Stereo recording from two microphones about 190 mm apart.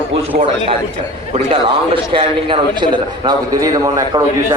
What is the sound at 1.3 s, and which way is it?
A man's voice, 30° right (ahead or behind).